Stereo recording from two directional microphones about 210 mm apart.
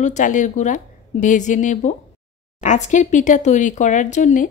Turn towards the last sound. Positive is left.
turn(degrees=35)  # may be behind; listen again after turning